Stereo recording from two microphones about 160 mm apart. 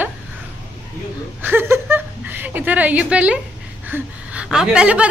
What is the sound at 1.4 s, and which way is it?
A woman's voice, 15° right (ahead or behind).